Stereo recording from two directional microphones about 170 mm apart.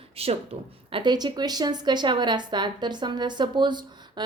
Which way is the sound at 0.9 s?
25° right (ahead or behind).